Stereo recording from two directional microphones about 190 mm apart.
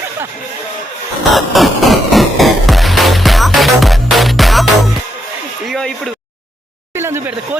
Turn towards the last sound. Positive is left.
turn(degrees=-10)  # may be behind; listen again after turning